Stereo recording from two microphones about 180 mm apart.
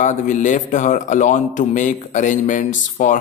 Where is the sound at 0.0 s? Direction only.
45° left (ahead or behind).